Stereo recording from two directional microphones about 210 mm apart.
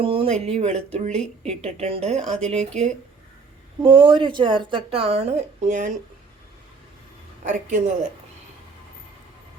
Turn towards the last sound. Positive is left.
turn(degrees=-35)  # may be behind; listen again after turning